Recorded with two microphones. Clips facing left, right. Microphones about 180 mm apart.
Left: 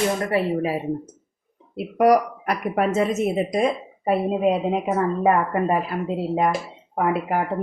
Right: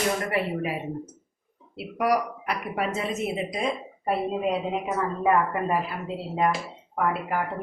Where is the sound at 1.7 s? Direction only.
45° left (ahead or behind).